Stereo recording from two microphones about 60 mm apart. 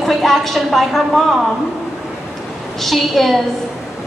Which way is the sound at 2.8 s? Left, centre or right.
Centre.